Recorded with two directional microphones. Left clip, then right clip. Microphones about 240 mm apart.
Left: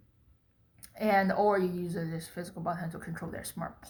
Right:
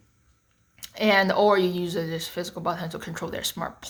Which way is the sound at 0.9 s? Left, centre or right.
Right.